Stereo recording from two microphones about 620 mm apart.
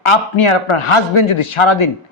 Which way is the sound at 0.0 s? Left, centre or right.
Left.